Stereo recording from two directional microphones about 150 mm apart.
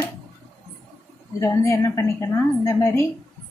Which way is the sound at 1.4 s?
20° left (ahead or behind).